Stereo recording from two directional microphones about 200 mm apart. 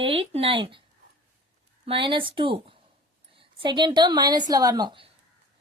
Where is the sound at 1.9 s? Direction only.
25° right (ahead or behind).